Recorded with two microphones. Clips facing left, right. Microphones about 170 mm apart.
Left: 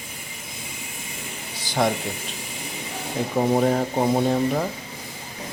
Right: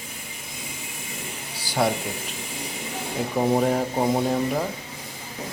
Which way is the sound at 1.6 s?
10° right (ahead or behind).